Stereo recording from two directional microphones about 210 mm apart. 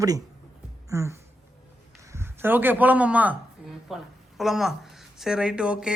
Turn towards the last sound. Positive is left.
turn(degrees=-5)  # may be behind; listen again after turning